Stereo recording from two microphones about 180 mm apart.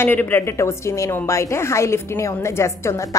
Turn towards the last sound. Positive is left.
turn(degrees=15)  # may be behind; listen again after turning